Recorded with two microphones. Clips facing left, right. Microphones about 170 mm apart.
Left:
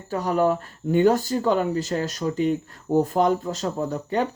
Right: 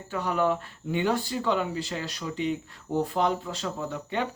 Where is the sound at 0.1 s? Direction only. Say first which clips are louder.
Left 5 dB; 40° left (ahead or behind).